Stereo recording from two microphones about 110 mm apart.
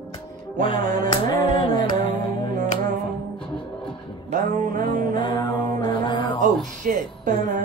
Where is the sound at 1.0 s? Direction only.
45° left (ahead or behind).